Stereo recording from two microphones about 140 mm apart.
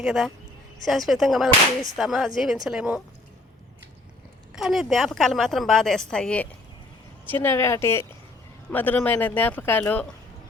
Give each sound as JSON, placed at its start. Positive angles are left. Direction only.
{"t": 0.0, "sound": "a woman's voice", "side_deg": 0}
{"t": 4.5, "sound": "a woman's voice", "side_deg": -5}